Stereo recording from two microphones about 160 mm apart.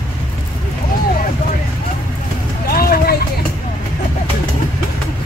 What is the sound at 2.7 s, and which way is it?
Vehicle, 65° left (ahead or behind).